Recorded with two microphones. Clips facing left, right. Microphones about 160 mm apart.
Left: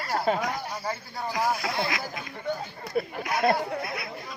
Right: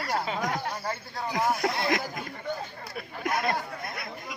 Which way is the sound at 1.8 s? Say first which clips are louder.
Right 4 dB; 50° right (ahead or behind).